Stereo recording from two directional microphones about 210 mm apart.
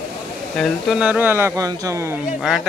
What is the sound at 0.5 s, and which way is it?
Speech, centre (ahead or behind).